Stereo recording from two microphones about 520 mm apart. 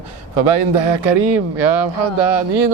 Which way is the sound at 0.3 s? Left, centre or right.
Right.